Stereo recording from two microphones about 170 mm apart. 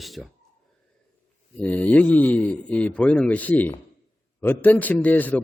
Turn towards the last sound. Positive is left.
turn(degrees=10)  # may be behind; listen again after turning